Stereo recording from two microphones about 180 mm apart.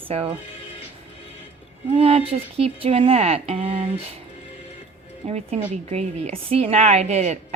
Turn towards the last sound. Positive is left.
turn(degrees=-40)  # may be behind; listen again after turning